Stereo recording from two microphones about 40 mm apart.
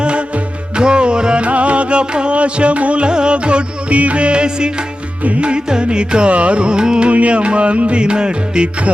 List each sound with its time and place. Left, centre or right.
0.8 s music: right
5.2 s music: right
7.1 s music: right